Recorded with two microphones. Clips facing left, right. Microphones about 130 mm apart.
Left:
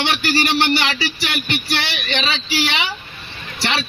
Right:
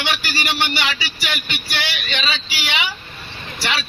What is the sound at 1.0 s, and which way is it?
Speech, 45° left (ahead or behind).